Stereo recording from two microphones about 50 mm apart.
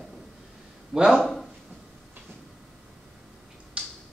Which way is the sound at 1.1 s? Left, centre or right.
Centre.